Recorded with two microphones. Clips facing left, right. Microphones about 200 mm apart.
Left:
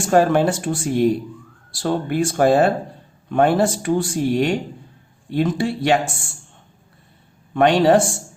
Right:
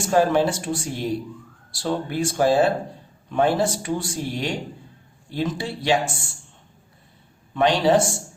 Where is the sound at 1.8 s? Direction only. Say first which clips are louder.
Left 4 dB; 55° left (ahead or behind).